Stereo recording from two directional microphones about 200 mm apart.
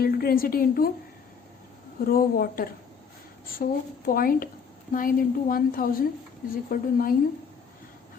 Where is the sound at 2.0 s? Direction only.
45° left (ahead or behind).